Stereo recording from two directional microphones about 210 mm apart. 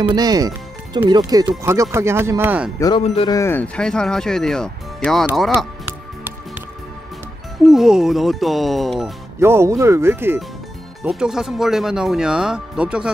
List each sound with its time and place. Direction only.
0.1 s speech: 20° right (ahead or behind)
2.8 s speech: 25° left (ahead or behind)
3.3 s speech: 10° left (ahead or behind)
7.6 s speech: centre (ahead or behind)
9.4 s speech: 15° right (ahead or behind)